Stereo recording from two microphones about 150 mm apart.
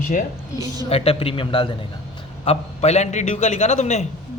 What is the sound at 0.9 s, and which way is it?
A man's voice, 40° left (ahead or behind).